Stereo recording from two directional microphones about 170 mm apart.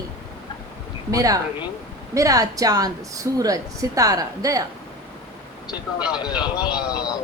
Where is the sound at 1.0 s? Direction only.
20° right (ahead or behind).